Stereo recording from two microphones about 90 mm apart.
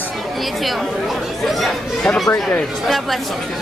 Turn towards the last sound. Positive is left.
turn(degrees=0)  # may be behind; listen again after turning